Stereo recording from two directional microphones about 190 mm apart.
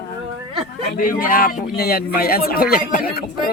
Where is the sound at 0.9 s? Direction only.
45° left (ahead or behind).